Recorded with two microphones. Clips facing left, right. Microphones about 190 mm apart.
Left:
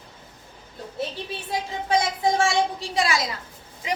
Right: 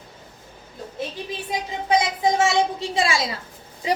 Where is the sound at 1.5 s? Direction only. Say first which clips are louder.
Right 2 dB; 20° right (ahead or behind).